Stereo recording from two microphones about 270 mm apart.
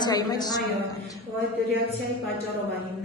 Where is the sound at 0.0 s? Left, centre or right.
Centre.